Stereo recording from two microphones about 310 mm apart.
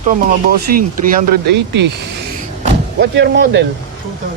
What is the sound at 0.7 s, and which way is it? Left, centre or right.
Speech, right.